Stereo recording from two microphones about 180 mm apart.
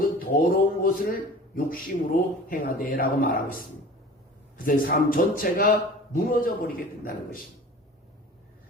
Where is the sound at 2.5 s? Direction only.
50° left (ahead or behind).